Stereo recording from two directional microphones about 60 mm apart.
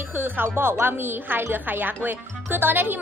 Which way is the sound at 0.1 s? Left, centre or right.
Right.